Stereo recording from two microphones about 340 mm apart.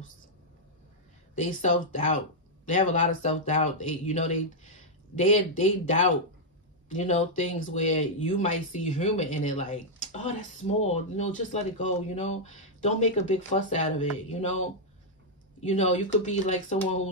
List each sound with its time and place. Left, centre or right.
1.3 s speech: left
15.6 s speech: left